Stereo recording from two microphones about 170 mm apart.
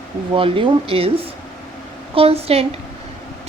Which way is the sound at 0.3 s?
30° right (ahead or behind).